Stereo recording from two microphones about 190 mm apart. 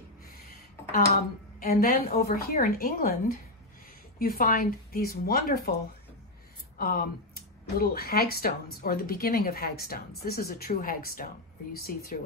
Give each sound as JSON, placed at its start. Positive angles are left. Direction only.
{"t": 1.6, "sound": "speech", "side_deg": 50}
{"t": 6.8, "sound": "speech", "side_deg": 50}